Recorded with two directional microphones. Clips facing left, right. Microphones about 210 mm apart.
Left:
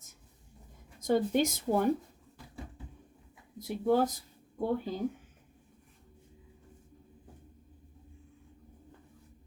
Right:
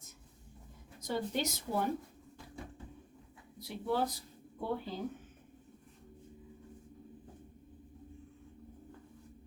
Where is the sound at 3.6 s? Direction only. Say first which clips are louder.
Left 7 dB; 45° left (ahead or behind).